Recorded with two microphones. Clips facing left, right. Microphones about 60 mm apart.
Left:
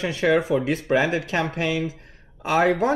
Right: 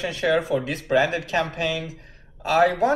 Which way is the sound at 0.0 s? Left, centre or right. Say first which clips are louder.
Left 2 dB; left.